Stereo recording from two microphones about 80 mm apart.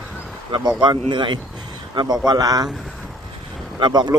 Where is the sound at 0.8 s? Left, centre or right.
Right.